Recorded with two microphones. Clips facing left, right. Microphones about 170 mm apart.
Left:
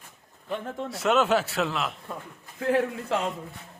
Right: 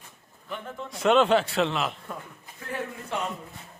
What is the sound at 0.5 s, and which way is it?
Speech, 40° left (ahead or behind).